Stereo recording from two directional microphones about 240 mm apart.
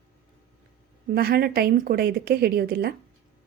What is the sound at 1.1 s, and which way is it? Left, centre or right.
A woman's voice, right.